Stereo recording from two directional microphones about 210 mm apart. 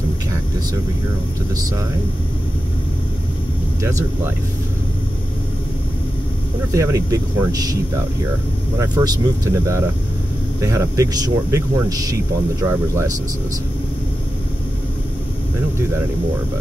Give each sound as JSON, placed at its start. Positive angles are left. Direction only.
{"t": 6.7, "sound": "speech", "side_deg": -15}
{"t": 8.7, "sound": "speech", "side_deg": -20}